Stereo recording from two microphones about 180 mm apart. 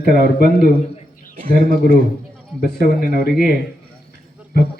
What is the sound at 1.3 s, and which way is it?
Speech, 50° right (ahead or behind).